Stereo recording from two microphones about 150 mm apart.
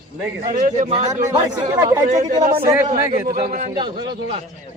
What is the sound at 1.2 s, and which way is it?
Speech, 20° right (ahead or behind).